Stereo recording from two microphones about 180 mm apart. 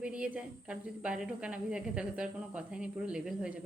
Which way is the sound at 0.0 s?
5° right (ahead or behind).